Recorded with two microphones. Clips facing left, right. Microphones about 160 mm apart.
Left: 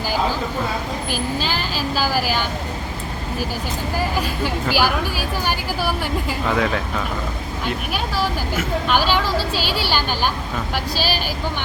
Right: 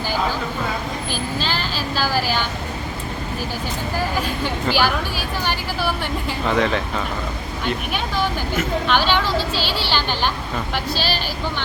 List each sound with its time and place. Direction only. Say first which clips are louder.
1.1 s speech: left 2 dB; 10° left (ahead or behind)
3.9 s speech: left 1 dB; 10° left (ahead or behind)